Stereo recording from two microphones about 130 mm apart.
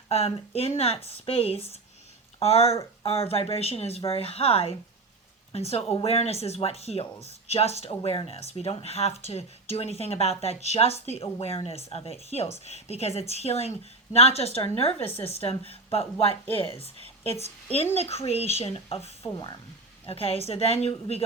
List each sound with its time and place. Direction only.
0.1 s speech: 45° left (ahead or behind)
17.9 s speech: 50° left (ahead or behind)